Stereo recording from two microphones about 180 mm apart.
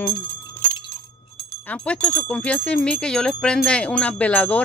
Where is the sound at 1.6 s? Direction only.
5° left (ahead or behind).